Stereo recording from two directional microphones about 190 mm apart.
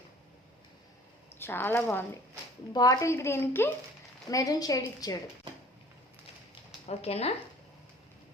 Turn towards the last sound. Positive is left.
turn(degrees=30)  # may be behind; listen again after turning